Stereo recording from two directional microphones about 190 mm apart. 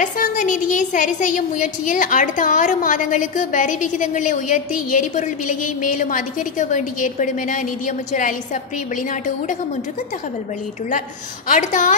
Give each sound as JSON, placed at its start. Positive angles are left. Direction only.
{"t": 0.0, "sound": "a woman's voice", "side_deg": 40}
{"t": 11.4, "sound": "a woman's voice", "side_deg": 40}